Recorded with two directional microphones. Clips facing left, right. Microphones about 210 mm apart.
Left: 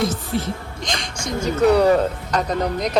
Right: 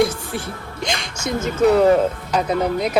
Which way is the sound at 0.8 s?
5° right (ahead or behind).